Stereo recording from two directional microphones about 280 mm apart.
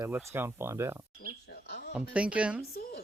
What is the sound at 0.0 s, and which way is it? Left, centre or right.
Speech, centre.